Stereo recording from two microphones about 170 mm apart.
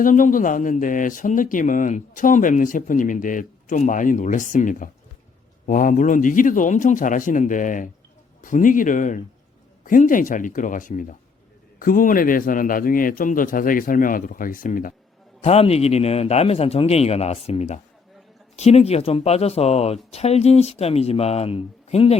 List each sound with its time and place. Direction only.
0.0 s a man's voice: 50° left (ahead or behind)
15.4 s speech: 35° left (ahead or behind)